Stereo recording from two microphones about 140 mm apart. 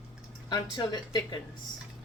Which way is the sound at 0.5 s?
30° left (ahead or behind).